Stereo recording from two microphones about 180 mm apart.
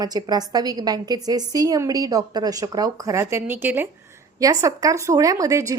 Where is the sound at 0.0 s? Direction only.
20° right (ahead or behind).